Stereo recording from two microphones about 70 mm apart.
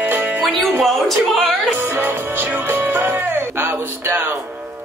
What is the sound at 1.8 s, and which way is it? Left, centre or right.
Music, right.